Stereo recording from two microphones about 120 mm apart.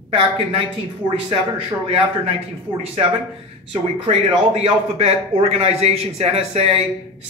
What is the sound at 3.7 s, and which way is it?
A man's voice, 55° right (ahead or behind).